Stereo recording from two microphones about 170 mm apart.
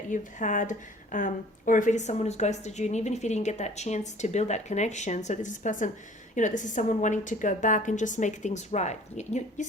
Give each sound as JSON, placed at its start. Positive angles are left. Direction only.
{"t": 0.1, "sound": "speech", "side_deg": 50}